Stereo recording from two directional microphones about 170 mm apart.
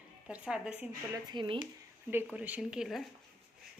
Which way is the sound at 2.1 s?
10° right (ahead or behind).